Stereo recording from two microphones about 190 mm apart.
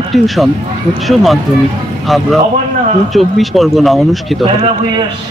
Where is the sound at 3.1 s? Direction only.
Centre (ahead or behind).